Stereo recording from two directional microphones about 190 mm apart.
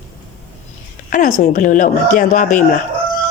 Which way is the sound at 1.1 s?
45° left (ahead or behind).